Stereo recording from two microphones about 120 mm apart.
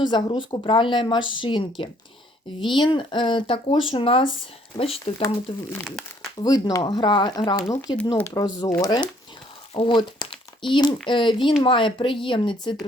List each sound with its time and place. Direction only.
0.0 s speech: 40° left (ahead or behind)
6.4 s speech: 30° left (ahead or behind)
9.7 s speech: 45° left (ahead or behind)